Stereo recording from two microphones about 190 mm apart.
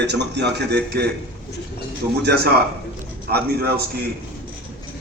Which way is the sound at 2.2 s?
55° right (ahead or behind).